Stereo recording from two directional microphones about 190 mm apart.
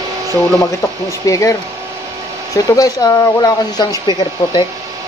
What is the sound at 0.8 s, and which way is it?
Speech, 15° left (ahead or behind).